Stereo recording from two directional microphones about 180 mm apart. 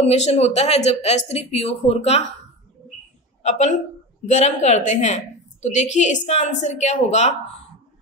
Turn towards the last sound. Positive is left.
turn(degrees=40)  # may be behind; listen again after turning